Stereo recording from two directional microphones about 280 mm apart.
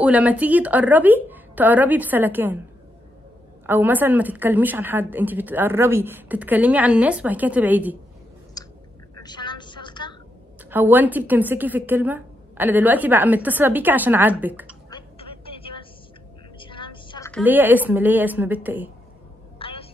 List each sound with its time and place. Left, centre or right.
0.0 s a woman's voice: centre
3.6 s a woman's voice: centre
8.6 s a sound: centre
9.2 s vehicle: centre
10.7 s a woman's voice: centre
14.9 s vehicle: centre
16.5 s a sound: centre
17.3 s a woman's voice: centre
19.6 s a sound: centre